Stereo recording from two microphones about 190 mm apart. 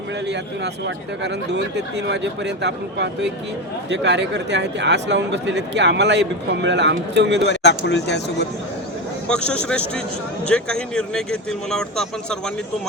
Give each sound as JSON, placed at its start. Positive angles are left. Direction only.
{"t": 0.3, "sound": "speech", "side_deg": -65}
{"t": 7.5, "sound": "speech", "side_deg": 65}
{"t": 9.2, "sound": "a man's voice", "side_deg": 5}